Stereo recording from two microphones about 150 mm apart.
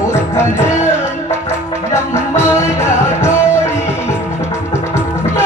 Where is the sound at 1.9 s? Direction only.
20° left (ahead or behind).